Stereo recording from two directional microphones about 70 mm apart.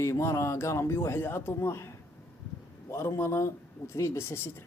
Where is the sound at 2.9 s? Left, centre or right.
Left.